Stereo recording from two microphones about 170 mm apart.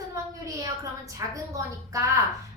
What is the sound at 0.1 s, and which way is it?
A woman's voice, 20° right (ahead or behind).